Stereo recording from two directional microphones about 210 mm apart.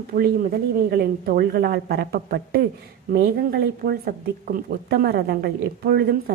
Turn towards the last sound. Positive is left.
turn(degrees=-45)  # may be behind; listen again after turning